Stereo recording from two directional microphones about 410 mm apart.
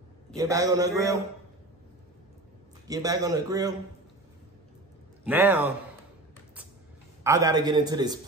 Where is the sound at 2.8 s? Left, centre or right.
Centre.